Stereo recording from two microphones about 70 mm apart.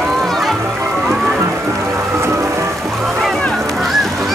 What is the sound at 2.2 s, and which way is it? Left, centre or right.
Music, right.